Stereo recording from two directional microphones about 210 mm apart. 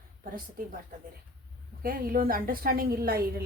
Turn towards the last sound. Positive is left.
turn(degrees=-45)  # may be behind; listen again after turning